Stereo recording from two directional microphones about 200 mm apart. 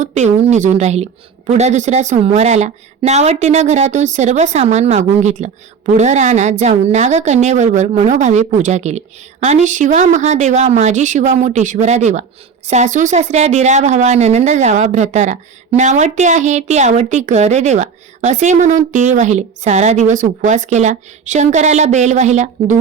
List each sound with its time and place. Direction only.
0.0 s a woman's voice: 35° right (ahead or behind)